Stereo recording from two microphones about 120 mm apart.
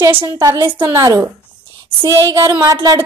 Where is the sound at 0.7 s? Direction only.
25° right (ahead or behind).